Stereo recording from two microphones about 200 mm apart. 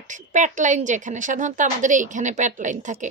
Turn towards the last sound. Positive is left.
turn(degrees=-40)  # may be behind; listen again after turning